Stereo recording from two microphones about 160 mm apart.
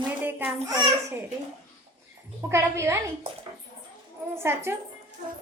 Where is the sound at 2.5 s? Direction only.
20° right (ahead or behind).